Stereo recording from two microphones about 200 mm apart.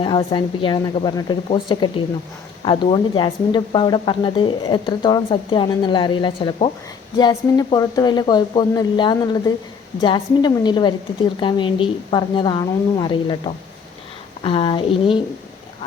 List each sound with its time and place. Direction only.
0.0 s speech: 25° left (ahead or behind)